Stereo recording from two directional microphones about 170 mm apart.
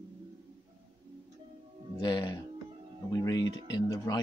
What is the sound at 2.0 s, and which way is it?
Speech, 25° left (ahead or behind).